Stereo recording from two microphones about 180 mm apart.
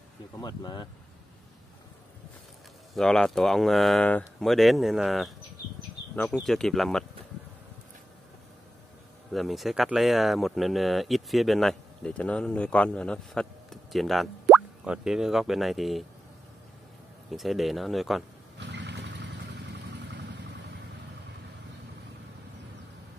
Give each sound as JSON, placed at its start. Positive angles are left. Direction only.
{"t": 0.4, "sound": "speech", "side_deg": 25}
{"t": 2.9, "sound": "speech", "side_deg": 5}
{"t": 9.3, "sound": "speech", "side_deg": 0}
{"t": 17.3, "sound": "speech", "side_deg": 0}
{"t": 18.6, "sound": "vehicle", "side_deg": -75}